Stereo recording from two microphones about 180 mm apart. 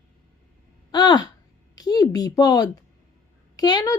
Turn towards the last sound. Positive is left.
turn(degrees=20)  # may be behind; listen again after turning